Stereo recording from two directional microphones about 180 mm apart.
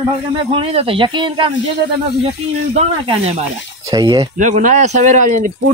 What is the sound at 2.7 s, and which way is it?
Speech, 35° right (ahead or behind).